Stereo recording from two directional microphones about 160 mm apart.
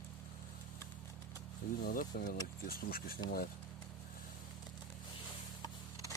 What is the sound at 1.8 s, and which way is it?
Speech, 65° left (ahead or behind).